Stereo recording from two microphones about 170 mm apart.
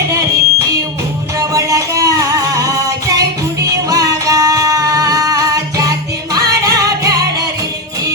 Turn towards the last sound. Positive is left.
turn(degrees=-20)  # may be behind; listen again after turning